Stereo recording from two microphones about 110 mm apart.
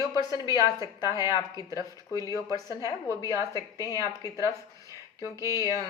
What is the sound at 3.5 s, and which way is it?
Speech, 30° left (ahead or behind).